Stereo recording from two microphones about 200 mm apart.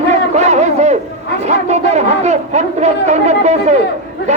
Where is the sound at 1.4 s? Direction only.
35° right (ahead or behind).